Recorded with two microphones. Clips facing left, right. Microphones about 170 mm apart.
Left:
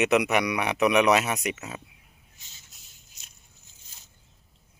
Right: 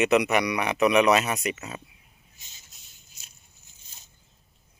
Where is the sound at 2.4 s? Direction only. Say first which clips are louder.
Right 1 dB; 15° right (ahead or behind).